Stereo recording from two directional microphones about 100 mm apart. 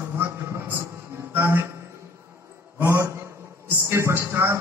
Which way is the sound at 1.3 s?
25° right (ahead or behind).